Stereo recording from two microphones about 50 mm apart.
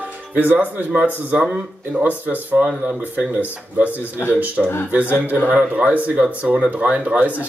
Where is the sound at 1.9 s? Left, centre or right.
Right.